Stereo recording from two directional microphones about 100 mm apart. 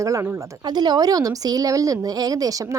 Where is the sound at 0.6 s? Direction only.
45° right (ahead or behind).